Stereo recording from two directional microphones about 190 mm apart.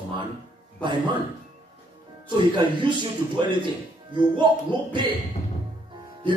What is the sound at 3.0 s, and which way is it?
A man's voice, 25° right (ahead or behind).